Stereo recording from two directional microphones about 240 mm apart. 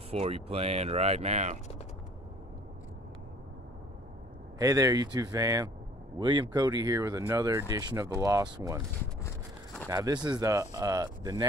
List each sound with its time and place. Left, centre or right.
0.1 s speech: right
4.6 s speech: centre
9.8 s speech: centre